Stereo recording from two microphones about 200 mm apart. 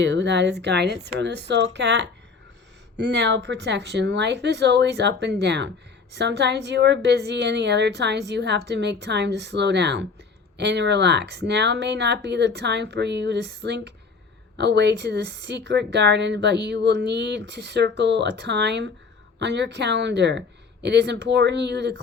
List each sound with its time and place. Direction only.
0.0 s speech: 60° right (ahead or behind)